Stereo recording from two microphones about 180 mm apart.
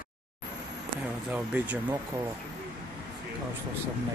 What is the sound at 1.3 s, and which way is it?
Speech, 10° right (ahead or behind).